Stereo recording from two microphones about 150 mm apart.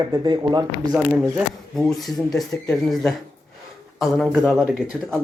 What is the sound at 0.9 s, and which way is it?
Speech, 5° right (ahead or behind).